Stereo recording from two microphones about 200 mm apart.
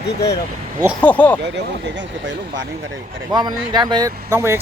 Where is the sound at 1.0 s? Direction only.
10° left (ahead or behind).